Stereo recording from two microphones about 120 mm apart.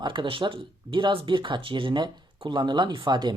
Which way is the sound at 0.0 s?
40° right (ahead or behind).